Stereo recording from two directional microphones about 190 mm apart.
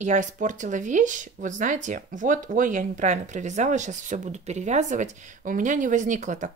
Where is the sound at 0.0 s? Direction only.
40° right (ahead or behind).